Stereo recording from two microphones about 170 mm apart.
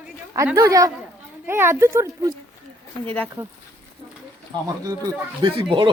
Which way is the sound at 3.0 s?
10° left (ahead or behind).